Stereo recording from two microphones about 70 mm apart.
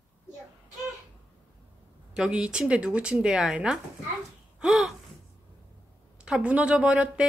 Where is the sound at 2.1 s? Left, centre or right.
Centre.